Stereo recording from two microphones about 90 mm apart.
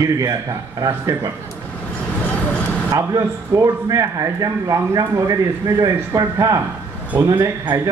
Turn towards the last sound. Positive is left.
turn(degrees=-45)  # may be behind; listen again after turning